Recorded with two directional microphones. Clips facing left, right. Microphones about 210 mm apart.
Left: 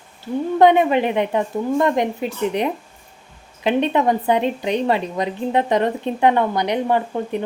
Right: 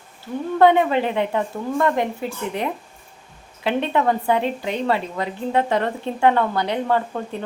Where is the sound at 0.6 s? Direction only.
20° left (ahead or behind).